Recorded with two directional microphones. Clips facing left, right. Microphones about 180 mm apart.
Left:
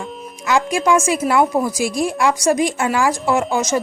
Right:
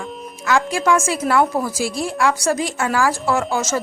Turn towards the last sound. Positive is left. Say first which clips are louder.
# left 2 dB
turn(degrees=15)  # may be behind; listen again after turning